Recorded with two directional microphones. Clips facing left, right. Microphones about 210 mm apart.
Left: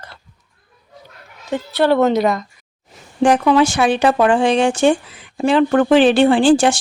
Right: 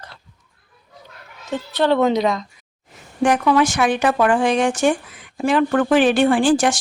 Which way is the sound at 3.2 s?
25° left (ahead or behind).